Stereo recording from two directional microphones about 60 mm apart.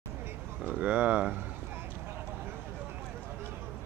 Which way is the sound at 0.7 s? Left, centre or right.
Right.